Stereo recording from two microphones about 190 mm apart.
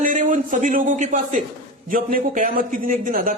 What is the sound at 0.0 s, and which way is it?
A man's voice, 45° right (ahead or behind).